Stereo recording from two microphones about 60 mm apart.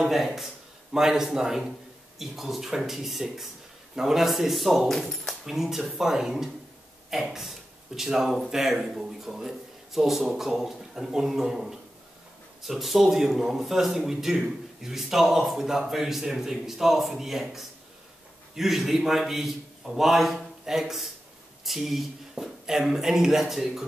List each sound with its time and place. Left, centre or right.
0.0 s a man's voice: centre